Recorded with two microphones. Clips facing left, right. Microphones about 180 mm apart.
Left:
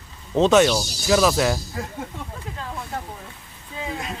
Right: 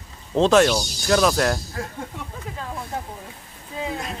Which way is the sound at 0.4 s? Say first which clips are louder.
Even; centre (ahead or behind).